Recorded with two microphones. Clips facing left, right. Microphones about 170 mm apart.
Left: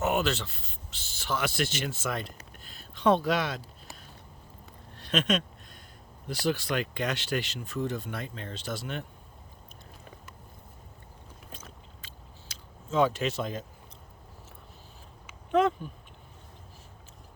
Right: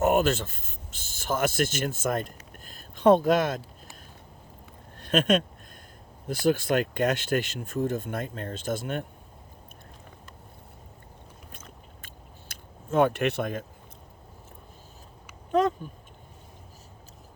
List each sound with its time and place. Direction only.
0.0 s speech: 50° right (ahead or behind)
4.9 s speech: 50° right (ahead or behind)
12.0 s a sound: 55° right (ahead or behind)
15.5 s speech: 40° right (ahead or behind)